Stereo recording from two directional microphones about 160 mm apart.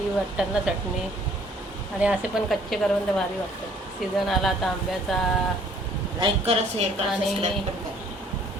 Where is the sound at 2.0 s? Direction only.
5° right (ahead or behind).